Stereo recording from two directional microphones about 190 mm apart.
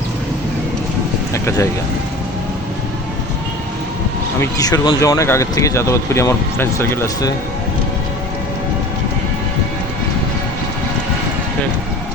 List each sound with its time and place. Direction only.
1.3 s speech: 15° left (ahead or behind)
4.4 s speech: 20° left (ahead or behind)